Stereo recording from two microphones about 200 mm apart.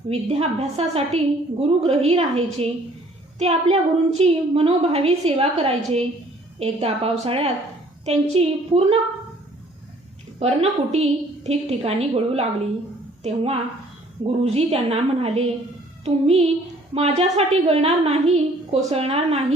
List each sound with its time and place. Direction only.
0.1 s a woman's voice: 30° right (ahead or behind)
10.4 s a woman's voice: 35° right (ahead or behind)